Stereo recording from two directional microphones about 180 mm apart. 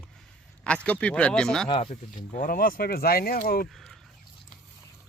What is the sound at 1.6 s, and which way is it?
Speech, 25° left (ahead or behind).